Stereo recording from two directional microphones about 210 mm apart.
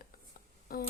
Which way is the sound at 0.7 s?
45° left (ahead or behind).